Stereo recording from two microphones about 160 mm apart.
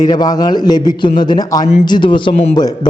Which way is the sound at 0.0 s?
25° left (ahead or behind).